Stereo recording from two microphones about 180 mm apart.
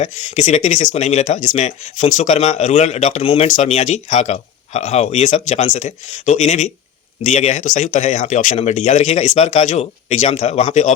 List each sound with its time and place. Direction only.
0.0 s speech: 40° left (ahead or behind)